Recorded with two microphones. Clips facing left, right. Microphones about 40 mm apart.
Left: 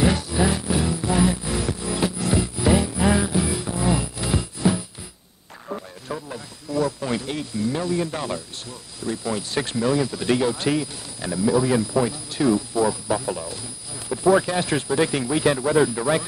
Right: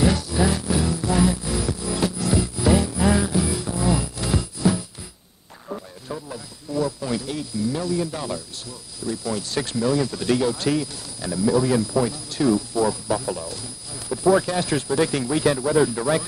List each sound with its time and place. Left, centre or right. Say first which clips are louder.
0.0 s music: even; left
4.6 s a sound: even; left
5.7 s radio: left 1 dB; left
7.0 s speech: left 1 dB; left
9.9 s speech: even; centre
15.5 s speech: left 1 dB; left
15.9 s speech: even; centre